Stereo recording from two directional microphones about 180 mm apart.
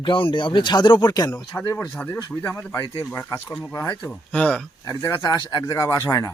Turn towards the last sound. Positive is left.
turn(degrees=20)  # may be behind; listen again after turning